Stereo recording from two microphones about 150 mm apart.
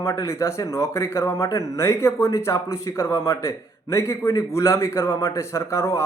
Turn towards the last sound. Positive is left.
turn(degrees=20)  # may be behind; listen again after turning